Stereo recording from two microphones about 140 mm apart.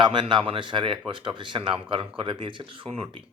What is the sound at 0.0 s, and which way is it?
Speech, 35° right (ahead or behind).